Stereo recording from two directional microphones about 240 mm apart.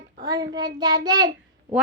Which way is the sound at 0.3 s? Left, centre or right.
Centre.